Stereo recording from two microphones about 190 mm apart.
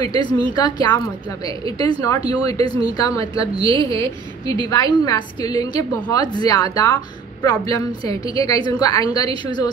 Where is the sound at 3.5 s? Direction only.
25° right (ahead or behind).